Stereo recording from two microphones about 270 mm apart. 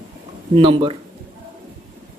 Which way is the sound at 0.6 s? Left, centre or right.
Centre.